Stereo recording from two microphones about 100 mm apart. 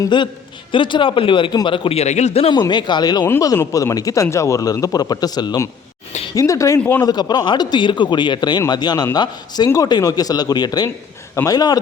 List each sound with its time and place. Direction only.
0.1 s a man's voice: 50° left (ahead or behind); by 2.5 s 90° left
2.5 s a man's voice: 50° left (ahead or behind)
6.3 s a man's voice: 30° left (ahead or behind)
6.7 s speech: 15° left (ahead or behind)
7.0 s a man's voice: 45° left (ahead or behind)